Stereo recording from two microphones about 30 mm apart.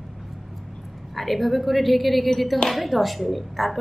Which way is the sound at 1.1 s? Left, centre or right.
Centre.